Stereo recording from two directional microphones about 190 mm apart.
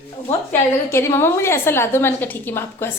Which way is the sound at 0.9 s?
15° left (ahead or behind).